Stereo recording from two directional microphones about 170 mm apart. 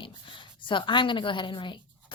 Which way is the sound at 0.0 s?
30° left (ahead or behind).